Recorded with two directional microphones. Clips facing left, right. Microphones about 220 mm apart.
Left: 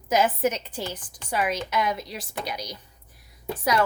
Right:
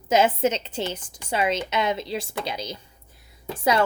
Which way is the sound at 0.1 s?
25° right (ahead or behind).